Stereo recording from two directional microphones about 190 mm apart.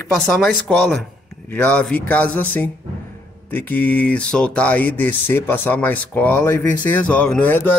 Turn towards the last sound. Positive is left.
turn(degrees=10)  # may be behind; listen again after turning